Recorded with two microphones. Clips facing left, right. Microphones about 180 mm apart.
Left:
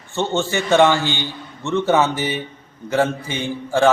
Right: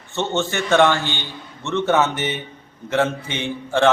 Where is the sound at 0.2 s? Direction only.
15° left (ahead or behind).